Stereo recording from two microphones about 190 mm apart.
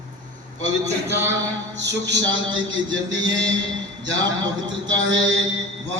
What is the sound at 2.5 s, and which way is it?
Speech, 90° right.